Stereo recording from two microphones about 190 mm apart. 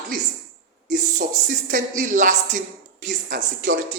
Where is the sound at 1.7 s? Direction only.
45° right (ahead or behind).